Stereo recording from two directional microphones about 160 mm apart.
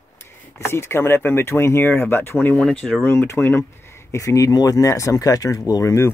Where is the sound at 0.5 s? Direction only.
15° left (ahead or behind).